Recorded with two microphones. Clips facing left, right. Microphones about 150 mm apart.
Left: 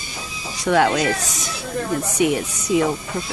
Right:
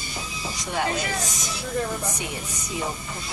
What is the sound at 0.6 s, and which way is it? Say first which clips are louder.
Speech: left 10 dB; 70° left (ahead or behind).